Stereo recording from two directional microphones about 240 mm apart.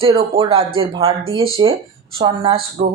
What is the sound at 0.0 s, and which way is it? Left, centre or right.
Speech, right.